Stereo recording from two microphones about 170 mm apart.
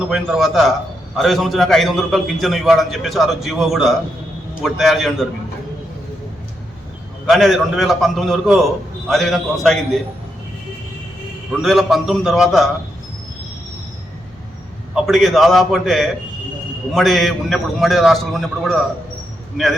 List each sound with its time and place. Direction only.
0.1 s a man's voice: centre (ahead or behind)
7.3 s a man's voice: centre (ahead or behind)
11.6 s a man's voice: centre (ahead or behind)
14.9 s a man's voice: centre (ahead or behind)